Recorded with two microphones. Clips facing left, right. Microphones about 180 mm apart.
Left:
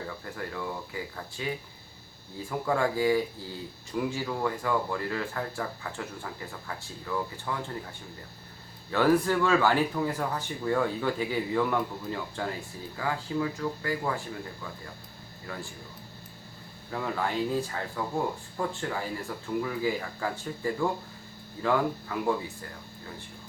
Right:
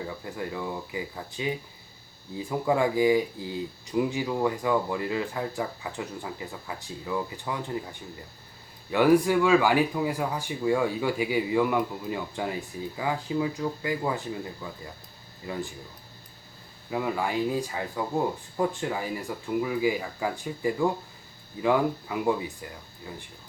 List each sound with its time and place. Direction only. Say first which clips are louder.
0.3 s speech: right 3 dB; 15° right (ahead or behind)
8.9 s speech: right 3 dB; 15° right (ahead or behind)
16.9 s speech: right 3 dB; 10° right (ahead or behind)